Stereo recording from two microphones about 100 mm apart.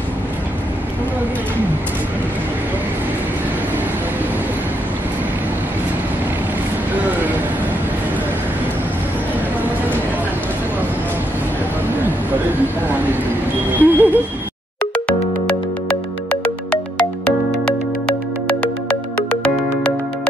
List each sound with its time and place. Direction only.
13.7 s a sound: 15° right (ahead or behind)
15.0 s music: 10° left (ahead or behind)
17.6 s music: 10° left (ahead or behind)